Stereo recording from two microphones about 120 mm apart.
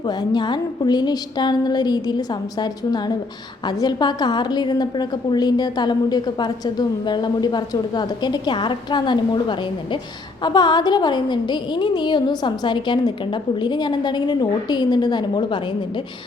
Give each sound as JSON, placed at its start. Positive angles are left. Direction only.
{"t": 0.0, "sound": "a woman's voice", "side_deg": 35}